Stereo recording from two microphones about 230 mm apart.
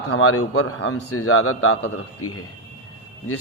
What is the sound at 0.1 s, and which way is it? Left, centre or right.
A man's voice, left.